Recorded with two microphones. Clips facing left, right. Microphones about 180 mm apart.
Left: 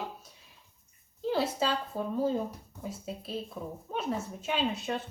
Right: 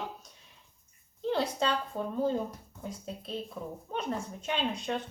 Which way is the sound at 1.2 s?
5° left (ahead or behind).